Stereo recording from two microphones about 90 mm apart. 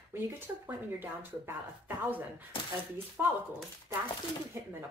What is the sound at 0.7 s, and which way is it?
Speech, 25° right (ahead or behind).